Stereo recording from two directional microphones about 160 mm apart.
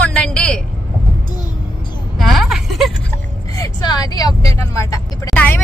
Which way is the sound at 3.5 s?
25° left (ahead or behind).